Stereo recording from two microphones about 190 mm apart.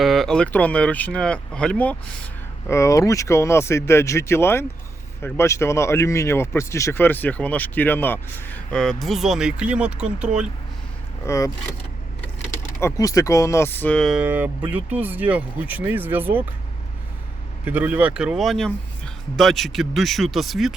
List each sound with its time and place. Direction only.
0.0 s speech: centre (ahead or behind)
11.3 s speech: 15° left (ahead or behind)
12.8 s speech: 20° left (ahead or behind); by 16.4 s 10° right (ahead or behind)
17.7 s speech: 10° right (ahead or behind)